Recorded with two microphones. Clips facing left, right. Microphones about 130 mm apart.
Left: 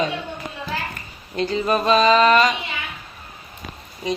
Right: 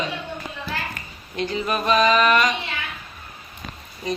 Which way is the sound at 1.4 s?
30° left (ahead or behind).